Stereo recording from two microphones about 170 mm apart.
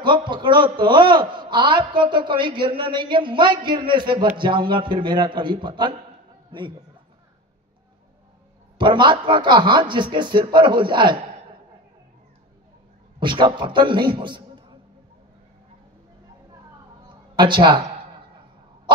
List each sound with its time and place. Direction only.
0.0 s a man's voice: 30° right (ahead or behind)
8.7 s a man's voice: 30° right (ahead or behind)
13.2 s a man's voice: 30° right (ahead or behind)
17.4 s a man's voice: 25° right (ahead or behind)